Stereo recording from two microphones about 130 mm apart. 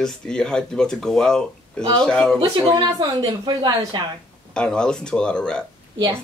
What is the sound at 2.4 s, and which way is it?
Speech, 25° right (ahead or behind).